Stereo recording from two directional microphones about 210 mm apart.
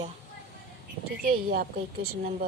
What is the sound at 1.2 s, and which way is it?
Speech, 45° right (ahead or behind).